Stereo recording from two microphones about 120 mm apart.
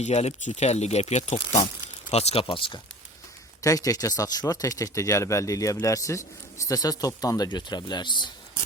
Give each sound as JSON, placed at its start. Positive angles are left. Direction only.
{"t": 0.0, "sound": "speech", "side_deg": 65}
{"t": 2.1, "sound": "speech", "side_deg": 55}
{"t": 3.6, "sound": "speech", "side_deg": 30}